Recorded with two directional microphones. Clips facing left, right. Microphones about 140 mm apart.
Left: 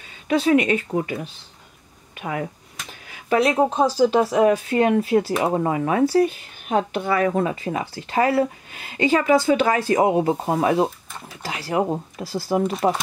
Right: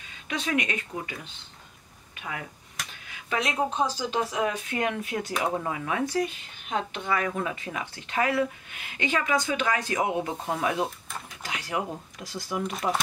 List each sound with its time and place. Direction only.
0.3 s speech: 30° left (ahead or behind)